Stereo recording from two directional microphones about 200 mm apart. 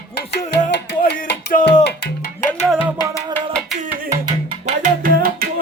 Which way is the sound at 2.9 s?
15° left (ahead or behind).